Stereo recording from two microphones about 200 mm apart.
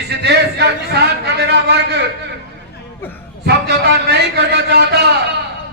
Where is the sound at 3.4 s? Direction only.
55° right (ahead or behind).